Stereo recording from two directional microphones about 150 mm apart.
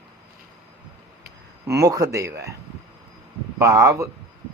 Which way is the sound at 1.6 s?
20° right (ahead or behind).